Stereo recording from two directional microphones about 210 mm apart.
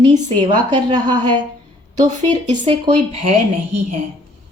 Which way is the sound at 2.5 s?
25° right (ahead or behind).